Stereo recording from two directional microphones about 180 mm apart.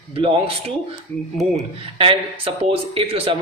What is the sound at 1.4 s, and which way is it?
A man's voice, 30° right (ahead or behind).